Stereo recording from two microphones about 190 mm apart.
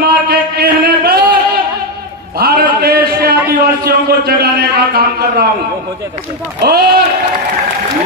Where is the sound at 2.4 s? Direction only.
55° right (ahead or behind).